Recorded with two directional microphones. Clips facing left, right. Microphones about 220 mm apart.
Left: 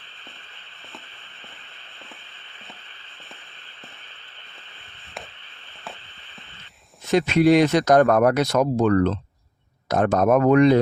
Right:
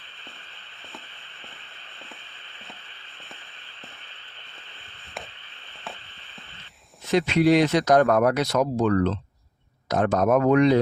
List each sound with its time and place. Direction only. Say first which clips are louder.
7.1 s speech: left 2 dB; 45° left (ahead or behind)